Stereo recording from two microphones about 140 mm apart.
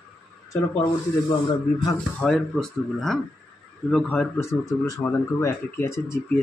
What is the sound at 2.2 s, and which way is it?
A man's voice, 5° left (ahead or behind).